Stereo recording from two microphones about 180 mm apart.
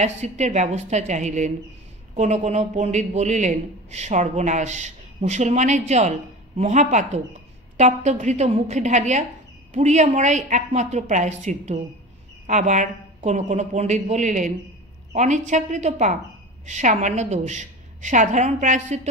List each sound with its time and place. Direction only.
0.0 s a man's voice: 40° right (ahead or behind)